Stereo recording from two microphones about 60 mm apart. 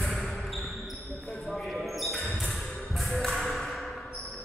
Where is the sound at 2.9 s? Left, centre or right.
Centre.